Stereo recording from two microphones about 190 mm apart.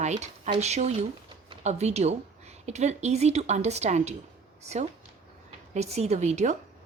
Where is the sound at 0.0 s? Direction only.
35° right (ahead or behind).